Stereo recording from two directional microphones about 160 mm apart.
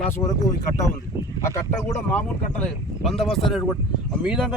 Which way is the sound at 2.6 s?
5° left (ahead or behind).